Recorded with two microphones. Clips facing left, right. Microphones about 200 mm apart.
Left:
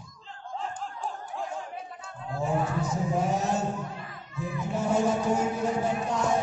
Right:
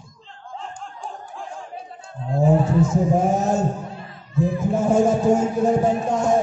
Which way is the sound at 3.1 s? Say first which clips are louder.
Right 7 dB; 50° right (ahead or behind).